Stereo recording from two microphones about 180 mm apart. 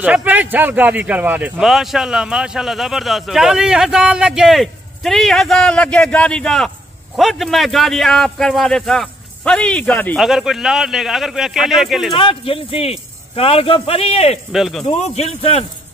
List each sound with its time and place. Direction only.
0.0 s a man's voice: 5° right (ahead or behind); by 10.2 s 10° left (ahead or behind)
10.2 s a man's voice: centre (ahead or behind)
12.1 s speech: 30° left (ahead or behind)
14.5 s a man's voice: centre (ahead or behind)
15.0 s speech: 35° left (ahead or behind)